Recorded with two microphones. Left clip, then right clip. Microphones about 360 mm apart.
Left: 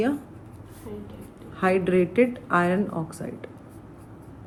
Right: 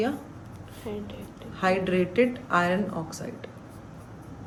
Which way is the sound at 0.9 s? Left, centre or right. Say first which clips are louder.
Right 4 dB; right.